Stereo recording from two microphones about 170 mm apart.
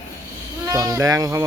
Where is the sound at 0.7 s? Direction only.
20° right (ahead or behind).